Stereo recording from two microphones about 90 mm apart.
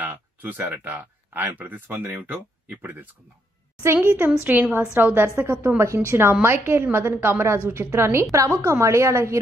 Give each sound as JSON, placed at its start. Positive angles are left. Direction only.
{"t": 0.0, "sound": "a woman's voice", "side_deg": -20}